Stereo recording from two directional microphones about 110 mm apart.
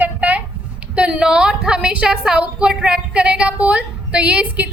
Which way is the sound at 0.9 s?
10° right (ahead or behind).